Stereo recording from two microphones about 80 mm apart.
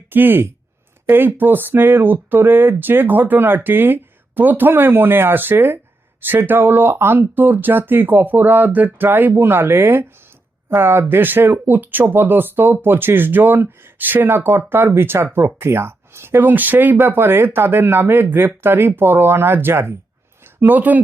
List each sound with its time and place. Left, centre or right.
0.1 s speech: right